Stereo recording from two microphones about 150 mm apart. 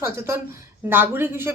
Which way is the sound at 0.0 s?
15° right (ahead or behind).